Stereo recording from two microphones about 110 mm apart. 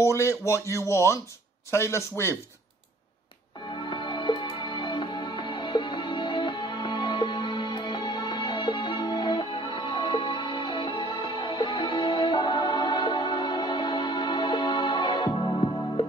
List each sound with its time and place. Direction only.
0.0 s speech: 25° left (ahead or behind)
3.8 s music: 45° left (ahead or behind)